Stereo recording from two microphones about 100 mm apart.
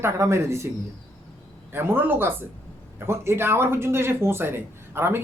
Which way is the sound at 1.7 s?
20° right (ahead or behind).